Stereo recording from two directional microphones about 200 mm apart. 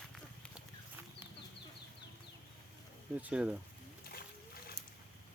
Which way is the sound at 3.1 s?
5° right (ahead or behind).